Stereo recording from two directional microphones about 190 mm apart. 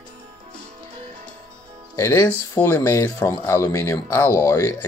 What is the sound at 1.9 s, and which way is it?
Speech, 15° left (ahead or behind).